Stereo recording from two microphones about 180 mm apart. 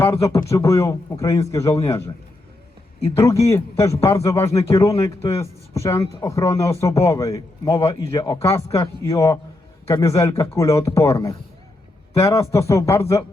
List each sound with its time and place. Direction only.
0.0 s speech: 15° left (ahead or behind)
3.2 s speech: 15° left (ahead or behind)